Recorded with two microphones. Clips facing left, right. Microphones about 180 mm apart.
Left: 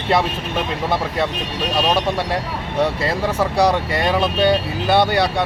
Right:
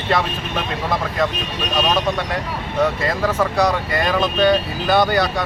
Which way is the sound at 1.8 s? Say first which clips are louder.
Even; 30° left (ahead or behind).